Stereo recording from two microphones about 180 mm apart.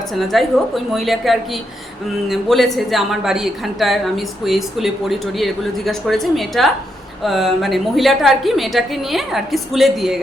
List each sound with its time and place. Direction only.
0.3 s a woman's voice: centre (ahead or behind)